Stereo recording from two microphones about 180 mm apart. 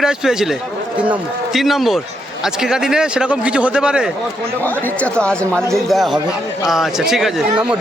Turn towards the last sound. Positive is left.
turn(degrees=-5)  # may be behind; listen again after turning